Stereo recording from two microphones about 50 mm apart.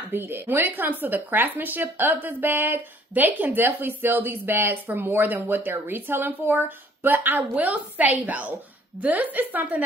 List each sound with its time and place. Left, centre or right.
0.1 s speech: right